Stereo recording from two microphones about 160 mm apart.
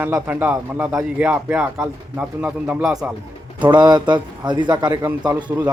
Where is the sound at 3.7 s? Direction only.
25° right (ahead or behind).